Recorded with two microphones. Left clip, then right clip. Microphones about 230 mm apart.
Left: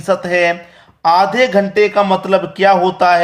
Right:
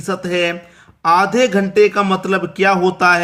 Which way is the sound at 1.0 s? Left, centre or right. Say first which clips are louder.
Left 2 dB; right.